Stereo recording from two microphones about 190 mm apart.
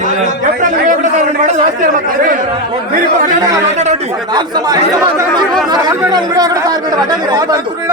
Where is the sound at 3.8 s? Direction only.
35° right (ahead or behind).